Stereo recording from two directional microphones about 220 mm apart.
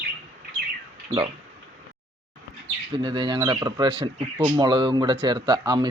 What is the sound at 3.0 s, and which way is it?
Speech, 20° right (ahead or behind).